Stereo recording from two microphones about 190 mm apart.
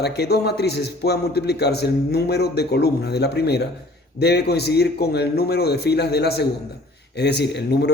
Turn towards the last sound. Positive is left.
turn(degrees=60)  # may be behind; listen again after turning